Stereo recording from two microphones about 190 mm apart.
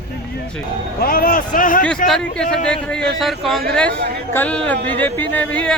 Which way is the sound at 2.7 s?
5° left (ahead or behind).